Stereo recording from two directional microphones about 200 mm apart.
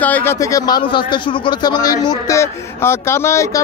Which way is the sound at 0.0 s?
10° left (ahead or behind).